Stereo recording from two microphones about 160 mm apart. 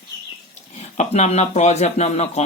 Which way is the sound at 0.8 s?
45° left (ahead or behind).